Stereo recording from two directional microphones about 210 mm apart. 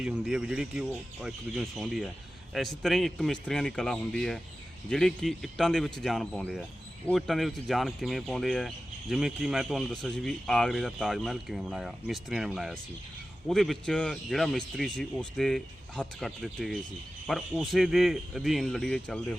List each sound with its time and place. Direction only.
0.0 s speech: 5° right (ahead or behind)